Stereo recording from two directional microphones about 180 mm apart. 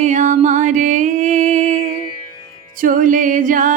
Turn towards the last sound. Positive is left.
turn(degrees=-45)  # may be behind; listen again after turning